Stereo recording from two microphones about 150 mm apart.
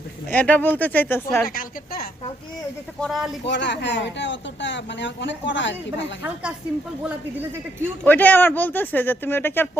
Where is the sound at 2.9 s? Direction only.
Centre (ahead or behind).